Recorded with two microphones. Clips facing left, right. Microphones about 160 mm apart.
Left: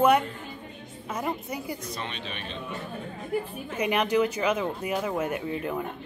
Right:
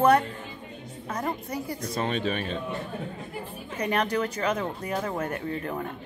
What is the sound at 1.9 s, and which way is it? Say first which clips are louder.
Speech: right 9 dB; 45° right (ahead or behind).